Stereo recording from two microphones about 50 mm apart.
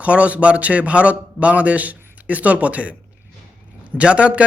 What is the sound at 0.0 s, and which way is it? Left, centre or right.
A man's voice, right.